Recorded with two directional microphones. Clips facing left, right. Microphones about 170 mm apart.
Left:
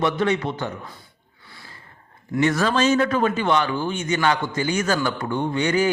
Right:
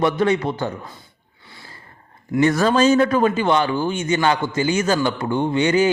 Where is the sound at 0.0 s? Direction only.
40° right (ahead or behind).